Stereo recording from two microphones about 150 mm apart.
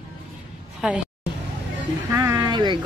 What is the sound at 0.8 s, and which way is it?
Speech, 5° right (ahead or behind).